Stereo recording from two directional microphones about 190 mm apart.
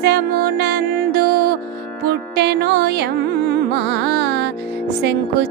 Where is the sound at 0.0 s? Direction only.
60° right (ahead or behind).